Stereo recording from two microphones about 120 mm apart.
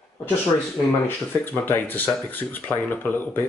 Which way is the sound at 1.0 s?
15° left (ahead or behind).